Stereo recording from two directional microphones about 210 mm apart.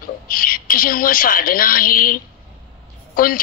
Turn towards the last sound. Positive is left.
turn(degrees=40)  # may be behind; listen again after turning